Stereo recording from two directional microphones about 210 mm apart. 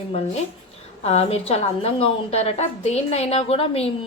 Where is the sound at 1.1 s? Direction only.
30° left (ahead or behind).